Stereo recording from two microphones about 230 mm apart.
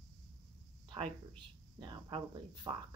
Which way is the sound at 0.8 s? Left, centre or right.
Right.